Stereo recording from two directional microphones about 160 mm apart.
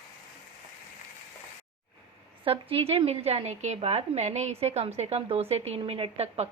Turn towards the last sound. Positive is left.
turn(degrees=-40)  # may be behind; listen again after turning